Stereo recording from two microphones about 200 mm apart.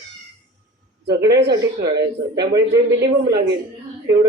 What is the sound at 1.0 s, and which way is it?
Speech, 55° right (ahead or behind).